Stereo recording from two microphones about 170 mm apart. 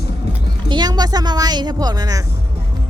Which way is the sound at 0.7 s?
25° right (ahead or behind).